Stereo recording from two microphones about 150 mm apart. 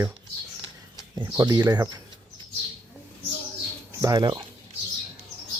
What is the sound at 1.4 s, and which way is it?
Speech, 25° right (ahead or behind).